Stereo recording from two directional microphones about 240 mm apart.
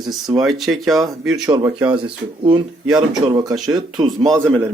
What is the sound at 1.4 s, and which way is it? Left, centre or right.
Speech, centre.